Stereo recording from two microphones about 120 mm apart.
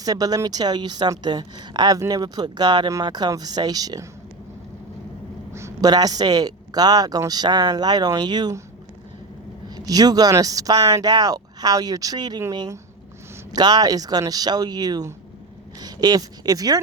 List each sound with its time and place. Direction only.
0.0 s speech: 30° right (ahead or behind)
5.5 s a sound: 25° right (ahead or behind)
5.9 s speech: 35° right (ahead or behind)
9.6 s speech: 30° right (ahead or behind)